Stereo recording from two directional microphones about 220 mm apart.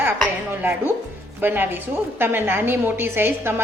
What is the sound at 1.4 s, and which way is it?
A woman's voice, 10° right (ahead or behind).